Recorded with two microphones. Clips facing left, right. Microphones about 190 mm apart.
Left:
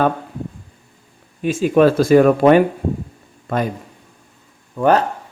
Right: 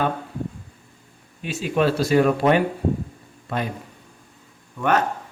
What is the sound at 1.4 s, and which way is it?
Speech, 45° left (ahead or behind).